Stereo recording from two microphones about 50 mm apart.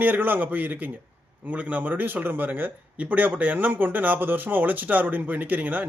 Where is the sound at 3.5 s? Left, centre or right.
Right.